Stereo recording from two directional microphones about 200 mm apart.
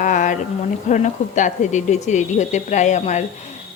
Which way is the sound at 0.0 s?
40° left (ahead or behind).